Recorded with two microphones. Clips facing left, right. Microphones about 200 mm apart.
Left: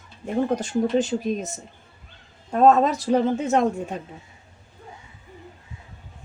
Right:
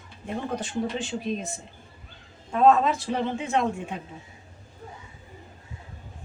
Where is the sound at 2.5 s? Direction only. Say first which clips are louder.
Left 3 dB; 40° left (ahead or behind).